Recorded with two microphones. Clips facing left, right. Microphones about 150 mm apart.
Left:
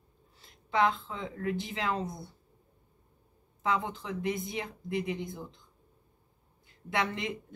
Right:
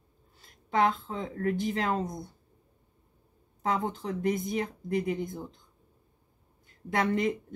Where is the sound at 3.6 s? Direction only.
45° right (ahead or behind).